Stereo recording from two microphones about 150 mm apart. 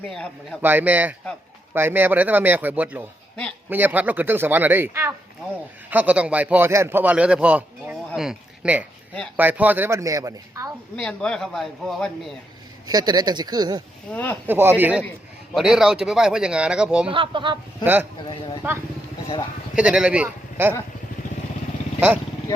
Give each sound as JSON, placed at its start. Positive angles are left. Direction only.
{"t": 0.1, "sound": "speech", "side_deg": 5}
{"t": 0.6, "sound": "a man's voice", "side_deg": -10}
{"t": 9.1, "sound": "speech", "side_deg": 5}
{"t": 9.4, "sound": "speech", "side_deg": -10}
{"t": 10.9, "sound": "speech", "side_deg": 5}
{"t": 12.9, "sound": "speech", "side_deg": -25}
{"t": 14.1, "sound": "speech", "side_deg": 10}
{"t": 14.4, "sound": "speech", "side_deg": -15}
{"t": 17.1, "sound": "speech", "side_deg": -35}
{"t": 18.6, "sound": "speech", "side_deg": -15}